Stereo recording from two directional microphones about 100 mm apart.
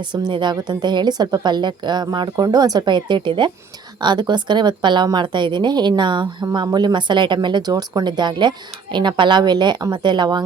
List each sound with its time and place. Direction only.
0.0 s speech: 50° right (ahead or behind)